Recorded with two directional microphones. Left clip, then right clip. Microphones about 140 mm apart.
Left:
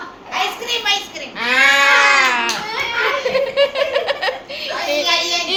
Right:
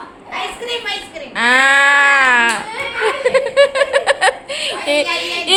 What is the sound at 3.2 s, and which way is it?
Speech, 55° right (ahead or behind).